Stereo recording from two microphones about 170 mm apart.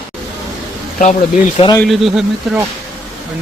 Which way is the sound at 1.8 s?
Centre (ahead or behind).